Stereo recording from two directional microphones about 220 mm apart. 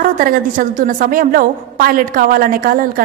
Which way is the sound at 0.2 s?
40° right (ahead or behind).